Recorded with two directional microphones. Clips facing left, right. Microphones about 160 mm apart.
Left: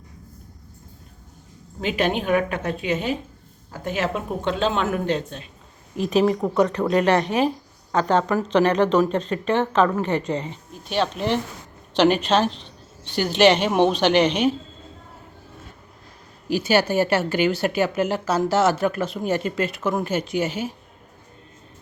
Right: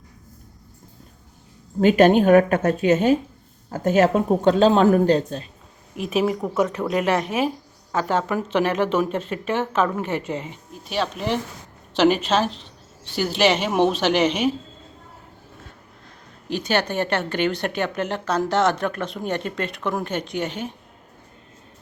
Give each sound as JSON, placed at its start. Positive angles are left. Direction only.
{"t": 1.8, "sound": "a woman's voice", "side_deg": -45}
{"t": 6.0, "sound": "speech", "side_deg": -5}
{"t": 16.5, "sound": "speech", "side_deg": 5}